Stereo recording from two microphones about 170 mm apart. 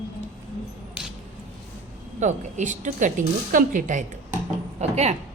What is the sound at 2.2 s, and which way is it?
A woman's voice, 45° right (ahead or behind).